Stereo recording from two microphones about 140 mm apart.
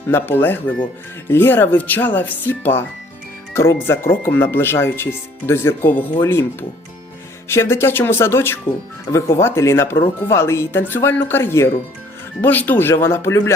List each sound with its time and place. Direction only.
0.1 s speech: 15° left (ahead or behind)